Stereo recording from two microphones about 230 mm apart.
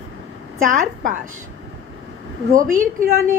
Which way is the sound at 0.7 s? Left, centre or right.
Right.